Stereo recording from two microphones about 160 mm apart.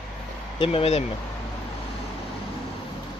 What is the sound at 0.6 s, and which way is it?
Speech, 35° left (ahead or behind).